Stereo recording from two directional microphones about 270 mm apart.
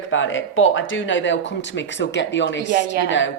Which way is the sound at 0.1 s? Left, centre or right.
Left.